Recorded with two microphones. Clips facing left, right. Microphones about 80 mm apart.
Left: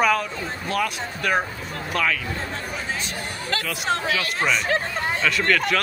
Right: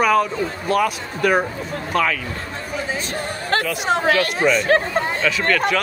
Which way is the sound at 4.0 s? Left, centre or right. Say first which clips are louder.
Right 8 dB; right.